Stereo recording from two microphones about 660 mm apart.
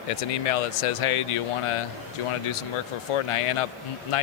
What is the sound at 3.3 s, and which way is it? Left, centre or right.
Speech, left.